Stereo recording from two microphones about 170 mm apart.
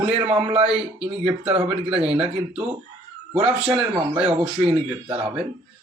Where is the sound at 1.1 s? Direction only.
35° right (ahead or behind).